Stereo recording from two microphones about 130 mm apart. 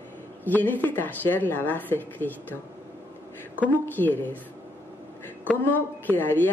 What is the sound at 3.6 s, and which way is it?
Speech, 15° left (ahead or behind).